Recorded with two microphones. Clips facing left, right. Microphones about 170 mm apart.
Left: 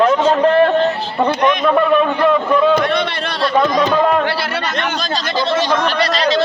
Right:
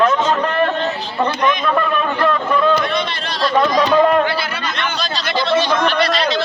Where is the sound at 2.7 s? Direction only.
65° left (ahead or behind).